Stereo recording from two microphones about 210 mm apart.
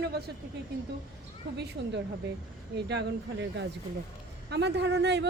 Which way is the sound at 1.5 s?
55° right (ahead or behind).